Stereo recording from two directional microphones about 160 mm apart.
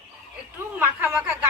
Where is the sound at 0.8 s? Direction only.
15° right (ahead or behind).